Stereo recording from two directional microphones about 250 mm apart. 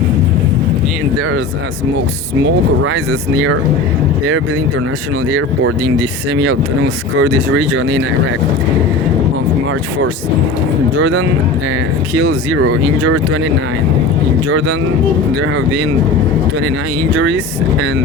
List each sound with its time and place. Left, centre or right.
2.9 s speech: right
5.3 s speech: right
10.9 s speech: right